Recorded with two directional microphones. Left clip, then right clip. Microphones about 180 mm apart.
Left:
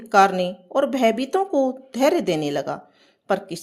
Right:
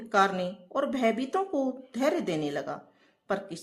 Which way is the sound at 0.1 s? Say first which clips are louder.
Left 9 dB; 35° left (ahead or behind).